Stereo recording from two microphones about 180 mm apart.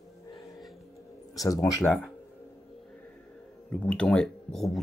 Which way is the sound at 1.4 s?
20° left (ahead or behind).